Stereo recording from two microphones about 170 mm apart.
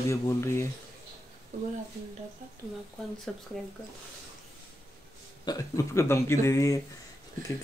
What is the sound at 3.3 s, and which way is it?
Speech, centre (ahead or behind).